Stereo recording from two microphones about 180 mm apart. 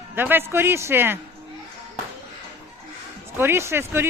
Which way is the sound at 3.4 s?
15° right (ahead or behind).